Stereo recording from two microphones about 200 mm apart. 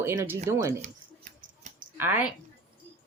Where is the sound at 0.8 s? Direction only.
35° right (ahead or behind).